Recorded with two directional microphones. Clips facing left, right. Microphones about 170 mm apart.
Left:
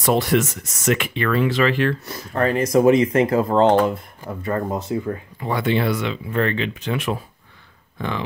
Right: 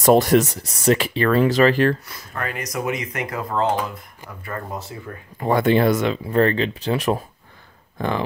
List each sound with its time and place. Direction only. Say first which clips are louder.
0.0 s speech: right 4 dB; 45° right (ahead or behind)
2.0 s speech: left 9 dB; 30° left (ahead or behind)
5.4 s speech: right 5 dB; 45° right (ahead or behind)